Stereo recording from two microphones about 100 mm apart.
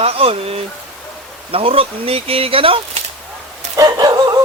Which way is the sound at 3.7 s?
40° right (ahead or behind).